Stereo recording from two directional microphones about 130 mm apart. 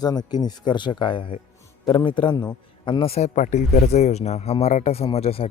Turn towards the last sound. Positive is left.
turn(degrees=50)  # may be behind; listen again after turning